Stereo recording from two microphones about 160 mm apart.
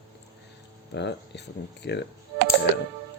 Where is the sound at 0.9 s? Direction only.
90° left.